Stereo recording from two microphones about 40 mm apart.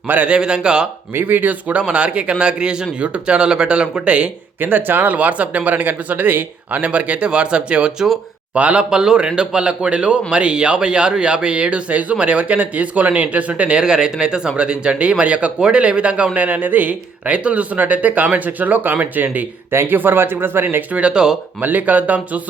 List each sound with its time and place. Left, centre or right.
0.3 s speech: right
1.1 s speech: right
1.9 s speech: right
4.6 s speech: right
5.1 s speech: right
8.5 s speech: right
8.8 s speech: right
17.3 s speech: right
19.7 s speech: right
20.0 s speech: right
20.9 s speech: right
21.6 s speech: right